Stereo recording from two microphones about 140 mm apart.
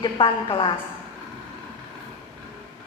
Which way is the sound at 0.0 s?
35° left (ahead or behind).